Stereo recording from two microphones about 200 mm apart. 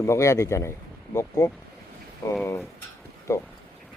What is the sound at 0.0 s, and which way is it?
Speech, 15° left (ahead or behind).